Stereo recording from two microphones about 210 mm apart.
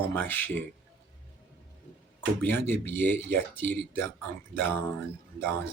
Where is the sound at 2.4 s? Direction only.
10° left (ahead or behind).